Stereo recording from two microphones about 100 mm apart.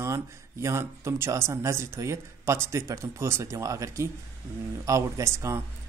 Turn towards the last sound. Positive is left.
turn(degrees=-30)  # may be behind; listen again after turning